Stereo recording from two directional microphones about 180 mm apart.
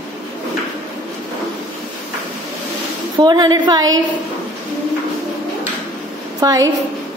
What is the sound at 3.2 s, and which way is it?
Speech, 25° right (ahead or behind).